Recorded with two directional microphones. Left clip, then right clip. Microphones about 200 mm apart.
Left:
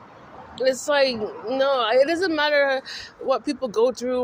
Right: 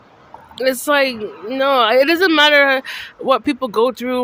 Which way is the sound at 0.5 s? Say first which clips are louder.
Right 5 dB; 45° right (ahead or behind).